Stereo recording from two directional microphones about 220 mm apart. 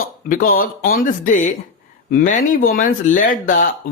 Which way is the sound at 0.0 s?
40° left (ahead or behind).